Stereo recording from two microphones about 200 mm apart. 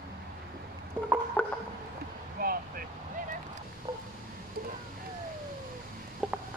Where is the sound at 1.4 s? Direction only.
10° left (ahead or behind).